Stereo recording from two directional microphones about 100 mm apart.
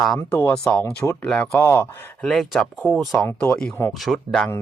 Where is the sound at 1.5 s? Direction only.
25° left (ahead or behind).